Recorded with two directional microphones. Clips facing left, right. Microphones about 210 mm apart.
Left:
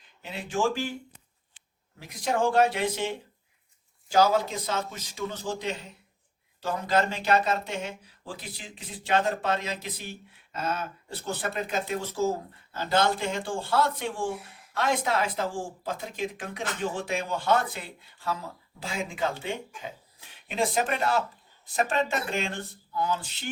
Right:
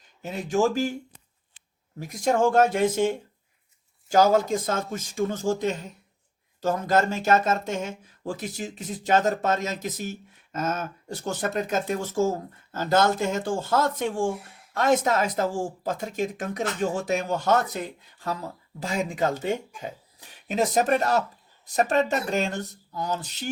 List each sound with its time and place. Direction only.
0.2 s speech: 45° right (ahead or behind)
2.0 s speech: 45° right (ahead or behind)